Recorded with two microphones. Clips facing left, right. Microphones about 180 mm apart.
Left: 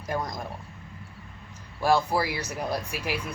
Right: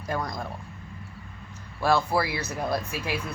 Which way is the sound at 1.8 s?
15° left (ahead or behind).